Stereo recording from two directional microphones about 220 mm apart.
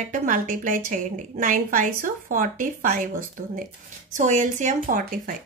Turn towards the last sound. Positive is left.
turn(degrees=-35)  # may be behind; listen again after turning